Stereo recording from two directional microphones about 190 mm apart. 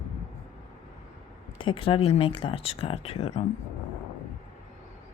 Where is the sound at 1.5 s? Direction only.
25° left (ahead or behind).